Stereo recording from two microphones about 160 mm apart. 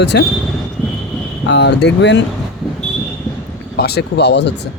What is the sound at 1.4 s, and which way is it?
Speech, 90° left.